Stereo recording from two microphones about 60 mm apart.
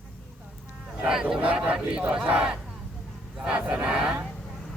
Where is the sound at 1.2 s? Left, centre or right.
Centre.